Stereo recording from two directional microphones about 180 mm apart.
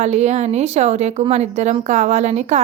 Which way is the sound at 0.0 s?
40° right (ahead or behind).